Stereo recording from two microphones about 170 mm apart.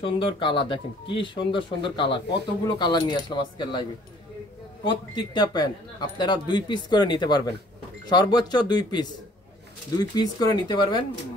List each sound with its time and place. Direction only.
0.0 s speech: 30° left (ahead or behind)
4.8 s speech: 25° left (ahead or behind)